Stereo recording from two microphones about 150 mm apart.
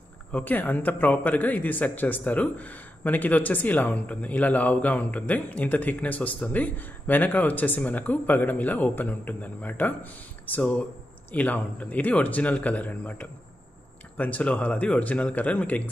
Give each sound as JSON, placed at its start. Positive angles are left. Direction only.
{"t": 0.3, "sound": "a man's voice", "side_deg": 10}